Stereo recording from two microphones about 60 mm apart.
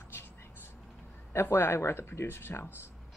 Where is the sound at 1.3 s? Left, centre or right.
Left.